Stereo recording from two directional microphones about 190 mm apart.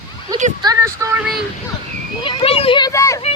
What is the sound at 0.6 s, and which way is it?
Speech, 20° right (ahead or behind).